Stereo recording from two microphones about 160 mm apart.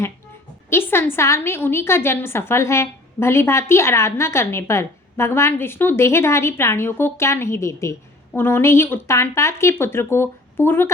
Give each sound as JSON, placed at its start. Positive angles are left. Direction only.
{"t": 0.7, "sound": "a woman's voice", "side_deg": 15}